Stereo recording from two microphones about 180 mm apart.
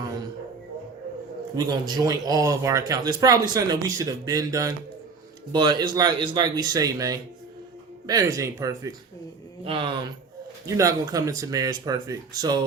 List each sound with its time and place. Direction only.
1.5 s speech: 25° right (ahead or behind)